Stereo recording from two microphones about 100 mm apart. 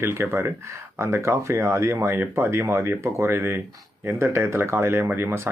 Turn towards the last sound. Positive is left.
turn(degrees=-25)  # may be behind; listen again after turning